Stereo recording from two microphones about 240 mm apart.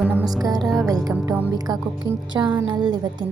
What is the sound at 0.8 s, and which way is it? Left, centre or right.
A woman's voice, centre.